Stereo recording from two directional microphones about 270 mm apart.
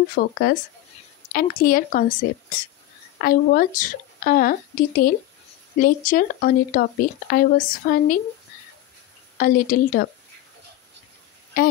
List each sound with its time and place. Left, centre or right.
0.1 s speech: left
3.2 s speech: left
9.4 s speech: left
11.6 s speech: left